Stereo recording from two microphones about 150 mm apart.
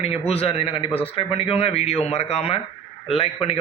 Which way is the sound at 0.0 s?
40° left (ahead or behind).